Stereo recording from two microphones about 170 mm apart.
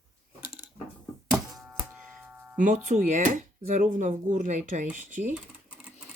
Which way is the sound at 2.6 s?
45° right (ahead or behind).